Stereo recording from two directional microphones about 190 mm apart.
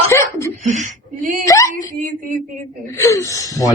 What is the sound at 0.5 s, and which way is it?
Speech, 40° right (ahead or behind).